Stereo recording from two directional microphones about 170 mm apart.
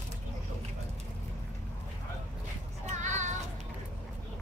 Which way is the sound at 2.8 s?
45° right (ahead or behind).